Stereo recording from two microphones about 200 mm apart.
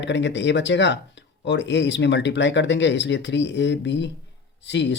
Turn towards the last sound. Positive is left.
turn(degrees=60)  # may be behind; listen again after turning